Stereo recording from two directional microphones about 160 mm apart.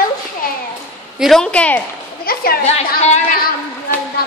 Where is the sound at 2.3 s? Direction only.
70° left (ahead or behind).